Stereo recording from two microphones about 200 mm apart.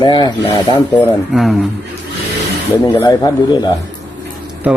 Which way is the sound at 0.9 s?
Centre (ahead or behind).